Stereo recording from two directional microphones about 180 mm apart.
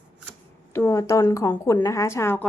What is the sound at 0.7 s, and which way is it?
A woman's voice, 15° left (ahead or behind).